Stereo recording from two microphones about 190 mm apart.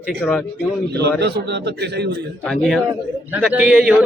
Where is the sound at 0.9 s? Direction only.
60° right (ahead or behind).